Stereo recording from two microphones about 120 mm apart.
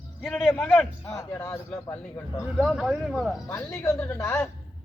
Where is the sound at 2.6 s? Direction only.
Centre (ahead or behind).